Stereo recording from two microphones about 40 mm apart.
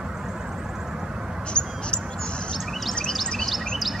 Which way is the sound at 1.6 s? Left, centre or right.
Right.